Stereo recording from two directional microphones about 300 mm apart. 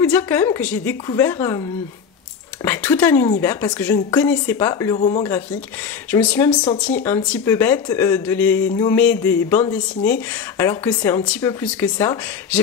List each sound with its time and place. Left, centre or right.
0.0 s speech: centre
2.6 s speech: centre
5.0 s speech: left
6.1 s speech: centre